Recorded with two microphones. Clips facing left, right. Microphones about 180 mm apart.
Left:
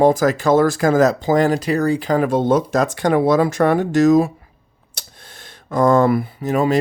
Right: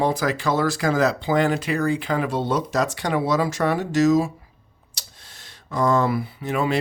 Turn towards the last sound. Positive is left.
turn(degrees=40)  # may be behind; listen again after turning